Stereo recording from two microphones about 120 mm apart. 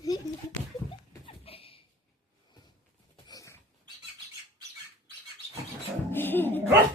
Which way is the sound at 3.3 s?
30° left (ahead or behind).